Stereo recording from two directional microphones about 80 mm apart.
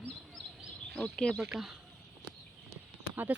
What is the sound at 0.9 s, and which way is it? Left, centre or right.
Speech, centre.